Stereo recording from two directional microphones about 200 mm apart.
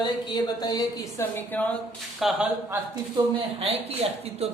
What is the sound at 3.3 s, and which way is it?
Speech, 30° right (ahead or behind).